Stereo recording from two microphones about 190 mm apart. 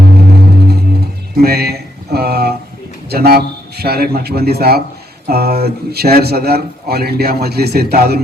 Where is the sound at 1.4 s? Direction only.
55° right (ahead or behind).